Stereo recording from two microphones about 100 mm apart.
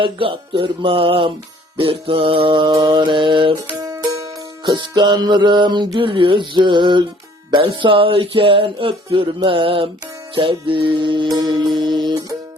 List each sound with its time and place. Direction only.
0.0 s speech: 60° right (ahead or behind)
1.7 s music: 65° right (ahead or behind)
3.5 s music: 35° right (ahead or behind)
4.6 s music: 50° right (ahead or behind)
7.5 s speech: 55° right (ahead or behind)
10.3 s music: 60° right (ahead or behind)